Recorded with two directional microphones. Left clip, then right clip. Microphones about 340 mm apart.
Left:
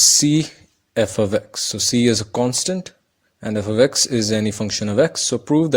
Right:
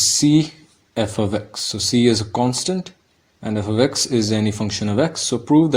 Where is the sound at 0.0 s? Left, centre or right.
Left.